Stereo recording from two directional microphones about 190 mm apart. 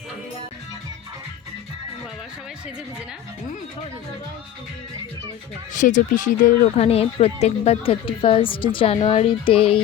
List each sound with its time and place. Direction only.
5.7 s speech: 40° left (ahead or behind)